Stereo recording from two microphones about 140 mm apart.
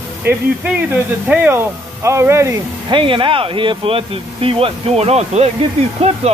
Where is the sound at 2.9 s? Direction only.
40° right (ahead or behind).